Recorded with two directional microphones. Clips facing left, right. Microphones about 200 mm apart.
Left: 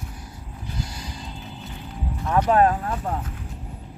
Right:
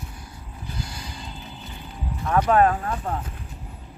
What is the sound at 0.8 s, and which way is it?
Music, 40° left (ahead or behind).